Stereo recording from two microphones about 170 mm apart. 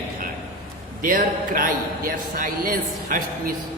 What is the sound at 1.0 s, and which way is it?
A man's voice, 55° right (ahead or behind).